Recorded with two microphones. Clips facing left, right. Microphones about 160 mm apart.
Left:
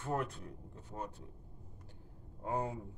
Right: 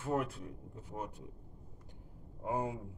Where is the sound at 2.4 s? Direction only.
10° right (ahead or behind).